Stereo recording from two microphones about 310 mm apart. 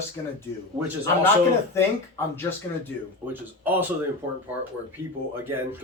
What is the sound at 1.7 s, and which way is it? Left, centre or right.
Speech, centre.